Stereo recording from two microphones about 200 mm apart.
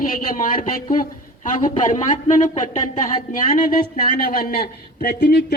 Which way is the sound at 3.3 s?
45° left (ahead or behind).